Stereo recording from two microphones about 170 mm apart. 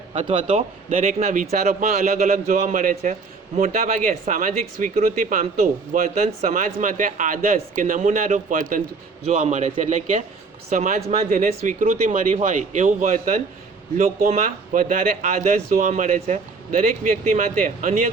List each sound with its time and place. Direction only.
0.1 s speech: 40° right (ahead or behind)